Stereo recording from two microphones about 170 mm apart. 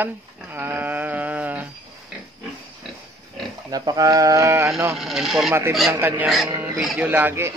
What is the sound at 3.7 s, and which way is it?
A man's voice, 20° right (ahead or behind).